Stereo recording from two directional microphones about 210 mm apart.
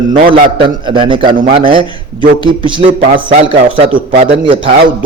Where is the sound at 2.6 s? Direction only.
25° right (ahead or behind).